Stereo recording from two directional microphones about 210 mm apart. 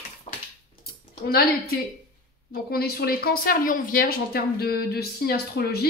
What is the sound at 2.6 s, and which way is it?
Speech, 45° left (ahead or behind).